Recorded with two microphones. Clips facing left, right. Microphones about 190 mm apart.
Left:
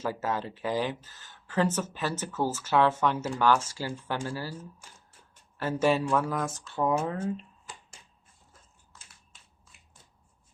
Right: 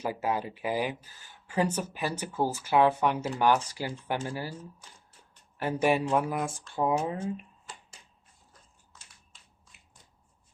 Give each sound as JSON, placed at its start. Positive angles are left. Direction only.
{"t": 0.0, "sound": "speech", "side_deg": -15}
{"t": 5.5, "sound": "speech", "side_deg": -15}